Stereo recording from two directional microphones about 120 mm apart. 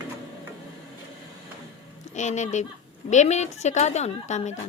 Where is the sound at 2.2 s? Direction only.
75° left (ahead or behind).